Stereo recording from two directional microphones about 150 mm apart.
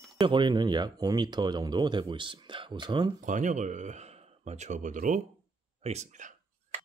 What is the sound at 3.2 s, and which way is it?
Speech, 55° right (ahead or behind).